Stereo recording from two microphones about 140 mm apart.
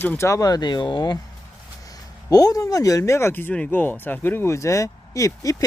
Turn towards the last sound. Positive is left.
turn(degrees=25)  # may be behind; listen again after turning